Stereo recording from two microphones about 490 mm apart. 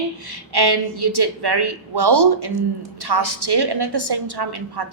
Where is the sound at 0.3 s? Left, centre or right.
Right.